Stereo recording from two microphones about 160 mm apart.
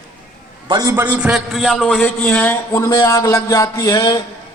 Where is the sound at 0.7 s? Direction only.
20° right (ahead or behind); by 4.2 s 25° left (ahead or behind).